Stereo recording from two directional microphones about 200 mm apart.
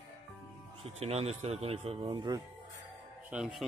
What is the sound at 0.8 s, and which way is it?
Speech, 30° right (ahead or behind).